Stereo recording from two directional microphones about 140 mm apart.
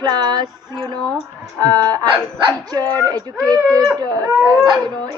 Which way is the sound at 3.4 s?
25° right (ahead or behind).